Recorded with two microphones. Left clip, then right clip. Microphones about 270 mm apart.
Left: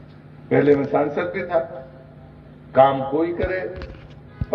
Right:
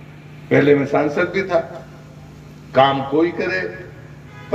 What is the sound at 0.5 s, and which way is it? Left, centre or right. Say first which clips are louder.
A man's voice: right 3 dB; right.